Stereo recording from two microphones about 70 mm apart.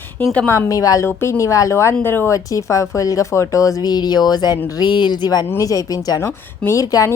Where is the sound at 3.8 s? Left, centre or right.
Left.